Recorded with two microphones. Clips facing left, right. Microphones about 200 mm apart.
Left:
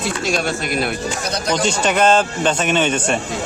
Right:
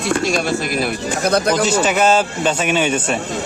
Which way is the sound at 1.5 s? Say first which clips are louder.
Right 2 dB; 5° right (ahead or behind).